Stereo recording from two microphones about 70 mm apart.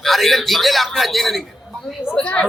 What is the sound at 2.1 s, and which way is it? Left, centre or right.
Speech, centre.